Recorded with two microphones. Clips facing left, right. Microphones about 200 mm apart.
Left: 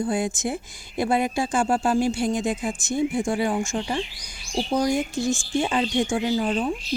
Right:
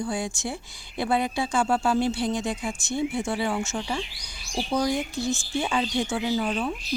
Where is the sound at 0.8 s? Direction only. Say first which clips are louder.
Left 4 dB; 45° left (ahead or behind).